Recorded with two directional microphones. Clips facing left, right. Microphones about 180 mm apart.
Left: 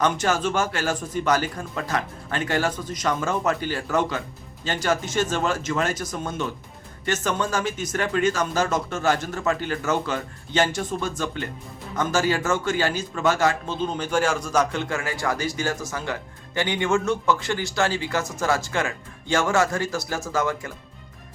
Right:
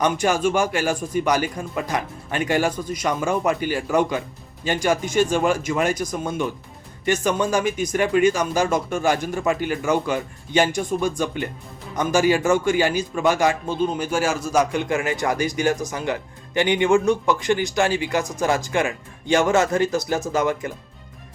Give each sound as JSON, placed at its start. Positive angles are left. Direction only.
{"t": 0.0, "sound": "speech", "side_deg": -15}